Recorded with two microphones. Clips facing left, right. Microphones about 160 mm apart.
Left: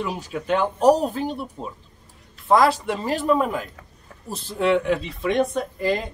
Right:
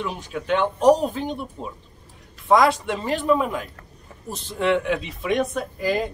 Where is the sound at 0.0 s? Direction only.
5° left (ahead or behind).